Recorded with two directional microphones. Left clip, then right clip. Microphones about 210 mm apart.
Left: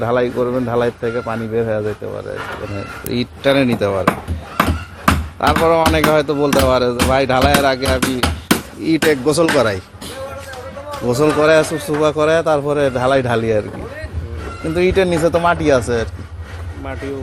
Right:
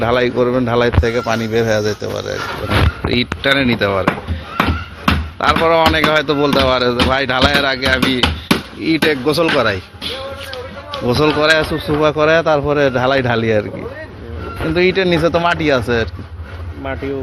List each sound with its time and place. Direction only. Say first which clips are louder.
0.0 s speech: right 2 dB; 10° right (ahead or behind)
3.1 s speech: left 1 dB; 5° left (ahead or behind)
5.4 s speech: right 2 dB; 5° left (ahead or behind)
8.8 s speech: left 1 dB; 15° left (ahead or behind)
11.1 s speech: even; centre (ahead or behind)
14.8 s speech: right 1 dB; 5° right (ahead or behind)